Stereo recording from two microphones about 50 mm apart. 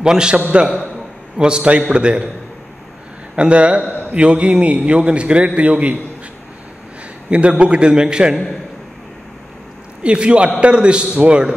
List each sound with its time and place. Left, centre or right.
0.0 s a man's voice: centre
1.4 s a man's voice: centre
3.3 s a man's voice: right
7.2 s a man's voice: right
10.0 s a man's voice: right